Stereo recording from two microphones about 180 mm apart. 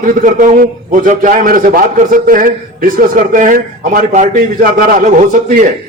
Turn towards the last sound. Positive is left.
turn(degrees=-45)  # may be behind; listen again after turning